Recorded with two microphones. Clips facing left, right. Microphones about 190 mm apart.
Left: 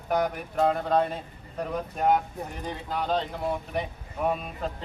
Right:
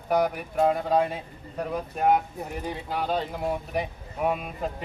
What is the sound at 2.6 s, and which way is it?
Speech, 10° right (ahead or behind).